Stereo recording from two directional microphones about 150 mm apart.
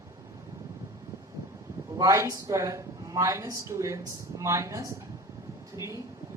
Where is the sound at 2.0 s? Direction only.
20° right (ahead or behind).